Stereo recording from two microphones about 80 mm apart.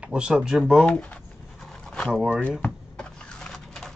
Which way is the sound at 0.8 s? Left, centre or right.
Centre.